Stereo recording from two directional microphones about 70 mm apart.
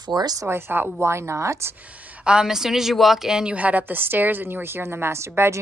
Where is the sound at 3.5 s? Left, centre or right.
Right.